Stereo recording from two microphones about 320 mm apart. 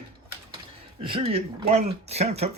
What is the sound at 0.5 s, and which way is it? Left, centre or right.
Speech, centre.